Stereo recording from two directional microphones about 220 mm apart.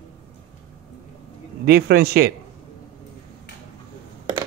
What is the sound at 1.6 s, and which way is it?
Speech, 45° right (ahead or behind).